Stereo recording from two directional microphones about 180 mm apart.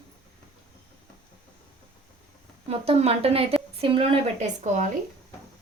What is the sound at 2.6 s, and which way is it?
Speech, 35° right (ahead or behind).